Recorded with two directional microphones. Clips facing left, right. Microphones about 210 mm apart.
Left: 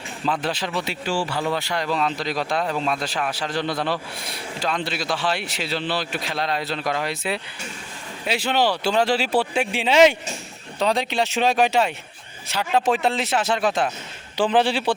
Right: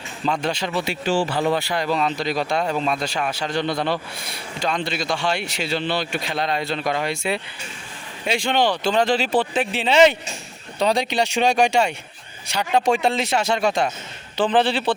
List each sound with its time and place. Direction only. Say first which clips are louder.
0.3 s speech: right 2 dB; 5° left (ahead or behind)
0.9 s speech: right 4 dB; 20° right (ahead or behind)
1.5 s speech: right 2 dB; 5° right (ahead or behind)